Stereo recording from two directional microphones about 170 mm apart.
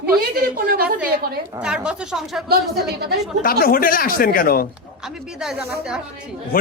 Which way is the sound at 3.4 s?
60° left (ahead or behind).